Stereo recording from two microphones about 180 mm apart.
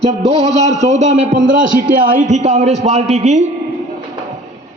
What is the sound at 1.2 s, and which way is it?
Speech, 90° right.